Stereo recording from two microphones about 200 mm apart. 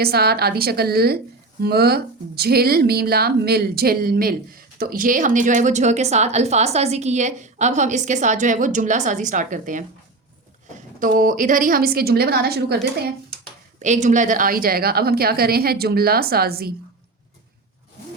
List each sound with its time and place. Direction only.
0.0 s a woman's voice: 50° right (ahead or behind)
11.0 s a woman's voice: 45° right (ahead or behind)
13.7 s a woman's voice: 35° right (ahead or behind)